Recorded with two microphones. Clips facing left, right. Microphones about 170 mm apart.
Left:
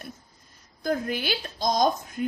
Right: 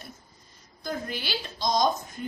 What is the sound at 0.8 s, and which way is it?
A woman's voice, 55° left (ahead or behind).